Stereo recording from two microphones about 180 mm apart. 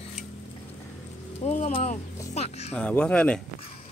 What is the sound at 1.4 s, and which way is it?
Speech, 35° left (ahead or behind).